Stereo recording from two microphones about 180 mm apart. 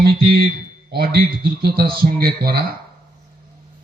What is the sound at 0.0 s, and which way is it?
Speech, 60° right (ahead or behind).